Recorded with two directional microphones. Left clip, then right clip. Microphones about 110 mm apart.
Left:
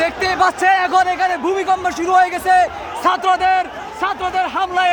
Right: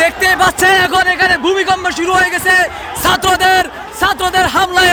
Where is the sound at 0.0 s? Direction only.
10° right (ahead or behind).